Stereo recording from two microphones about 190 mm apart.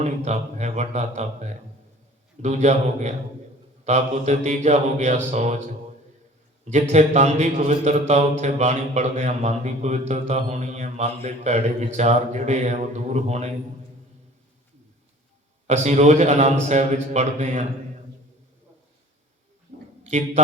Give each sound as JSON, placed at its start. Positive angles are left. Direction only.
{"t": 0.0, "sound": "speech", "side_deg": -35}
{"t": 6.9, "sound": "speech", "side_deg": -35}
{"t": 15.6, "sound": "speech", "side_deg": -35}
{"t": 20.1, "sound": "speech", "side_deg": -35}